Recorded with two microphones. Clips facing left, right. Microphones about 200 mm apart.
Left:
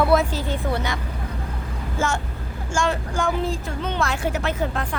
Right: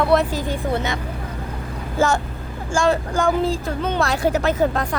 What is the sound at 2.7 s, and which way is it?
Speech, 35° right (ahead or behind).